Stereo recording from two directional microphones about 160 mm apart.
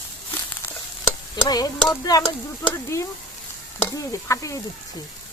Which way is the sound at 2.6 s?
15° left (ahead or behind).